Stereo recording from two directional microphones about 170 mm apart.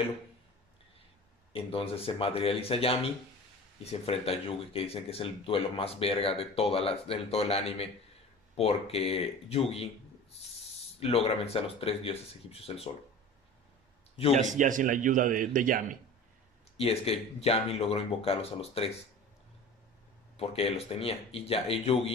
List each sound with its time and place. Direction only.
1.5 s speech: 35° left (ahead or behind)
11.0 s speech: 35° left (ahead or behind)
14.3 s a man's voice: 50° right (ahead or behind)
16.7 s speech: 35° left (ahead or behind)
20.3 s speech: 35° left (ahead or behind)